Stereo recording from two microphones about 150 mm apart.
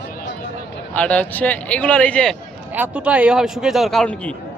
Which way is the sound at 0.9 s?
10° left (ahead or behind).